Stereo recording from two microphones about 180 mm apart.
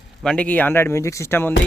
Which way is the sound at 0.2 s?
5° left (ahead or behind).